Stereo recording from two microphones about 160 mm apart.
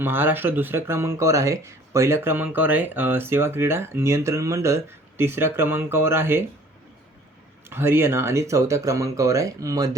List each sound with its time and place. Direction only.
0.0 s speech: 15° right (ahead or behind)
7.7 s speech: 15° right (ahead or behind)